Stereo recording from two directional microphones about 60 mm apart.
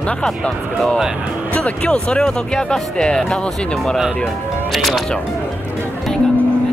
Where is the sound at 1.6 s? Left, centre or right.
Centre.